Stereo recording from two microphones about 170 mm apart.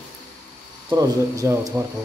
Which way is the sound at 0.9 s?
20° right (ahead or behind).